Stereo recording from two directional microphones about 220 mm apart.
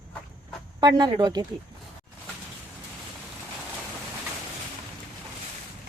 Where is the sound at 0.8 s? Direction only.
20° right (ahead or behind).